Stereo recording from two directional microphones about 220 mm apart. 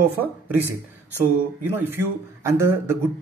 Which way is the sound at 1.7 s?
10° right (ahead or behind).